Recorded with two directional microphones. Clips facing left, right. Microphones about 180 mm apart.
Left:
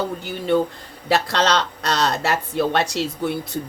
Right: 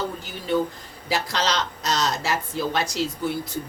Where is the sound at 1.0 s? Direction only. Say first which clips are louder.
Left 6 dB; 65° left (ahead or behind).